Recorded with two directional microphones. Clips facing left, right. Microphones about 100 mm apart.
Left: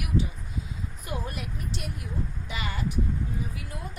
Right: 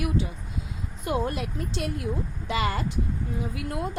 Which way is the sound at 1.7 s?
90° right.